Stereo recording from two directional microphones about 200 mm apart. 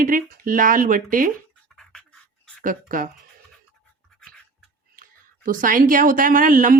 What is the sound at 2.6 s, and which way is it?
Speech, 40° right (ahead or behind).